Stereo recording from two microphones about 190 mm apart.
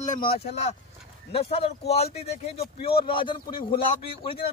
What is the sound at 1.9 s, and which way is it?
A man's voice, 35° left (ahead or behind).